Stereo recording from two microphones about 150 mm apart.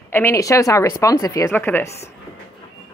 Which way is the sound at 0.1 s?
15° left (ahead or behind).